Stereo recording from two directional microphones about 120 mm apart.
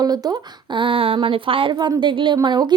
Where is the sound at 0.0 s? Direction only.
35° right (ahead or behind).